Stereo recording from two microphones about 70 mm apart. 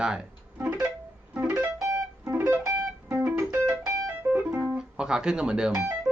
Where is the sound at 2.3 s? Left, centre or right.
Right.